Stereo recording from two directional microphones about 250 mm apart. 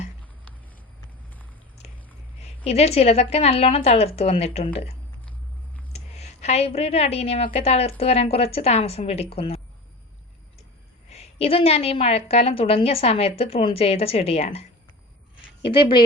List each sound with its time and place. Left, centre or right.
2.6 s a woman's voice: left
11.1 s a woman's voice: left
15.7 s speech: centre